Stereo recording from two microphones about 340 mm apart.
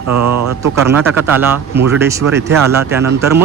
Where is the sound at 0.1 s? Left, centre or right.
Right.